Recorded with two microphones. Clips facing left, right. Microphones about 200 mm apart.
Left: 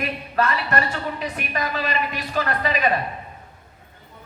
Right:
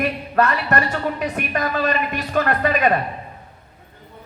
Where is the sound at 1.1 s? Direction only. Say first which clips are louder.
Right 4 dB; 50° right (ahead or behind).